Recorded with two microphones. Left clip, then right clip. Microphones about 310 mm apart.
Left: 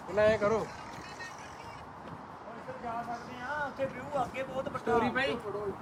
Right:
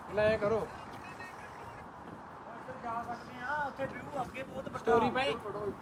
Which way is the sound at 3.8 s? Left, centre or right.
Centre.